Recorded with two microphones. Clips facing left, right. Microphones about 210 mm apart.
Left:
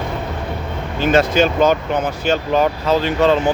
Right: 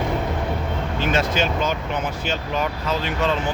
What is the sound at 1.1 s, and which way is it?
Speech, 40° left (ahead or behind).